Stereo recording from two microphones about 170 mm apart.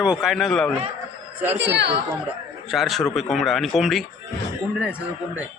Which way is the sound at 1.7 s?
90° right.